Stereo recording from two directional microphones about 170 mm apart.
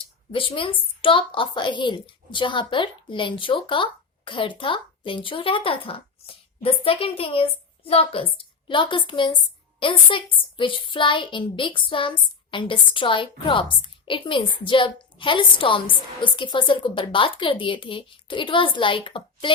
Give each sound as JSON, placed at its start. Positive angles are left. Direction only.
{"t": 0.3, "sound": "a woman's voice", "side_deg": 30}